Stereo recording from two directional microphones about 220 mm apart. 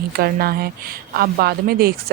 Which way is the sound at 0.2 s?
45° right (ahead or behind).